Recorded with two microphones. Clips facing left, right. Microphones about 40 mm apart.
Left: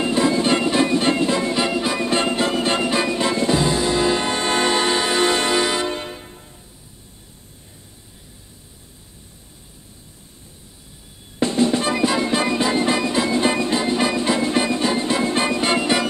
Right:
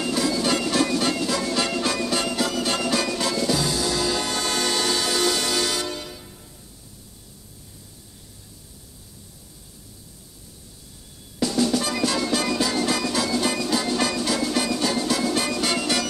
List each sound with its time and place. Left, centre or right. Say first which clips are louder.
0.0 s music: left 5 dB; left
2.0 s music: left 5 dB; left
11.3 s music: left 3 dB; left